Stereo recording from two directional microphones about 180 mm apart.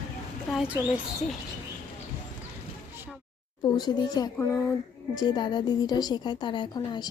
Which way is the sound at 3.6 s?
25° left (ahead or behind).